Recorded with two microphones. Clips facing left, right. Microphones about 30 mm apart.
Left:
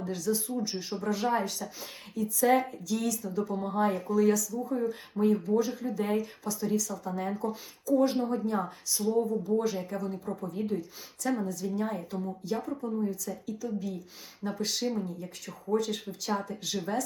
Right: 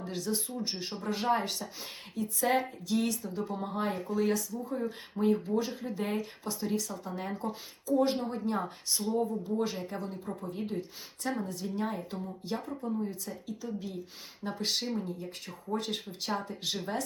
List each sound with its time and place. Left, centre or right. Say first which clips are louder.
0.0 s speech: left 4 dB; right
3.5 s speech: left 5 dB; centre
12.4 s speech: left 2 dB; right